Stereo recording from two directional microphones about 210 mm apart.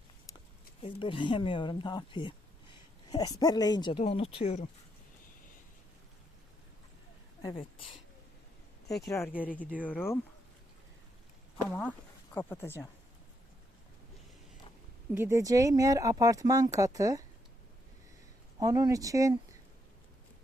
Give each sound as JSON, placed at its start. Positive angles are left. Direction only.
{"t": 0.8, "sound": "speech", "side_deg": 25}
{"t": 7.4, "sound": "speech", "side_deg": 25}
{"t": 9.0, "sound": "speech", "side_deg": 15}
{"t": 11.5, "sound": "speech", "side_deg": 5}
{"t": 15.1, "sound": "speech", "side_deg": -15}
{"t": 18.6, "sound": "speech", "side_deg": -15}